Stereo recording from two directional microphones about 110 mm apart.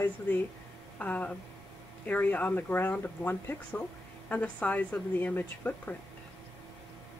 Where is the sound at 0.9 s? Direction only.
15° left (ahead or behind).